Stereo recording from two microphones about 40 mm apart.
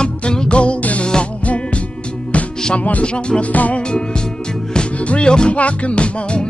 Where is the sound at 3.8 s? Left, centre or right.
Left.